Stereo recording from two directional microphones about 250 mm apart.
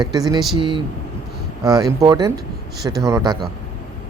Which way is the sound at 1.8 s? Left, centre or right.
Centre.